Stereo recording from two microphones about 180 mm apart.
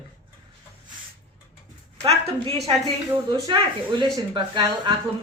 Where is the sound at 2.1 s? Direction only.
30° right (ahead or behind).